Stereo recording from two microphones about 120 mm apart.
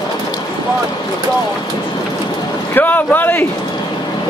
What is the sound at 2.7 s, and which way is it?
Speech, 15° left (ahead or behind).